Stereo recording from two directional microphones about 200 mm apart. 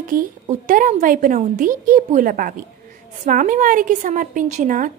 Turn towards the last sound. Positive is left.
turn(degrees=-40)  # may be behind; listen again after turning